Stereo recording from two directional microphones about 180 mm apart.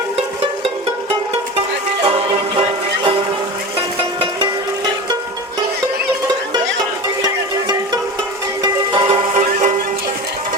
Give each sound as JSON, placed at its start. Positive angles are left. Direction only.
{"t": 2.0, "sound": "music", "side_deg": -30}
{"t": 8.6, "sound": "music", "side_deg": -25}